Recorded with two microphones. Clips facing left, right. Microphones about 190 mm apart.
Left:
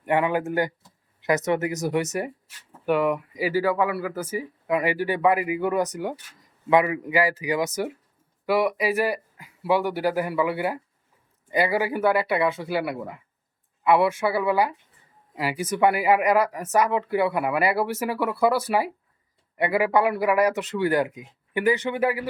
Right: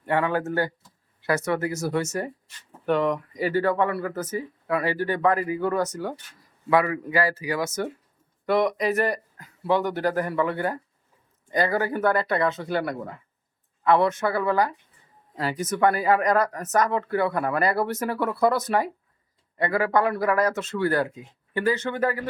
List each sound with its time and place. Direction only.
0.0 s speech: 15° left (ahead or behind)
8.4 s speech: 5° left (ahead or behind)